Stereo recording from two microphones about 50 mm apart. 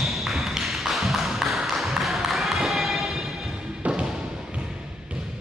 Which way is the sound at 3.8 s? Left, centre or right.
Right.